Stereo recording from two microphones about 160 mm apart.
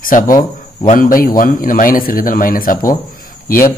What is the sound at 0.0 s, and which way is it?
A man's voice, 60° left (ahead or behind).